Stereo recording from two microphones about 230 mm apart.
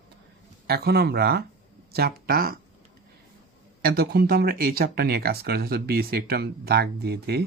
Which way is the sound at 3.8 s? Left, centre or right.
Right.